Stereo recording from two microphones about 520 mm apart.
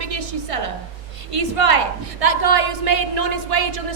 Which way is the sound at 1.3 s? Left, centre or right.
Right.